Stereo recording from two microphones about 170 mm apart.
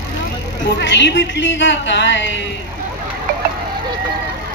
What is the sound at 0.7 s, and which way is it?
A woman's voice, 90° left.